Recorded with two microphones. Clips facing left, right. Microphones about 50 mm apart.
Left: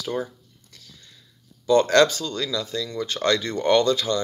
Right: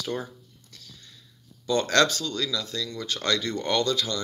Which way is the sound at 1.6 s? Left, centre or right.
Left.